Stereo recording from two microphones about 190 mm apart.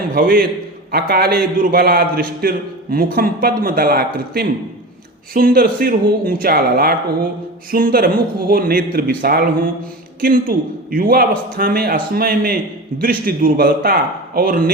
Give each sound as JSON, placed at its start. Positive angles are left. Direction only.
{"t": 0.1, "sound": "a man's voice", "side_deg": -50}